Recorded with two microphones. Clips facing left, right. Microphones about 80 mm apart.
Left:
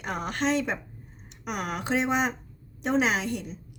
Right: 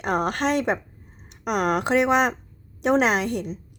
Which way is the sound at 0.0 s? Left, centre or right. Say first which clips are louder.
Right 6 dB; right.